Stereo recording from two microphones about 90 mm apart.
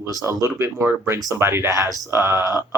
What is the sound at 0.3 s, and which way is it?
Speech, 30° right (ahead or behind).